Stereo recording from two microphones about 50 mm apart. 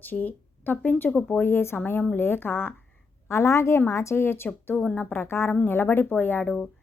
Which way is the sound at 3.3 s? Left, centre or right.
Left.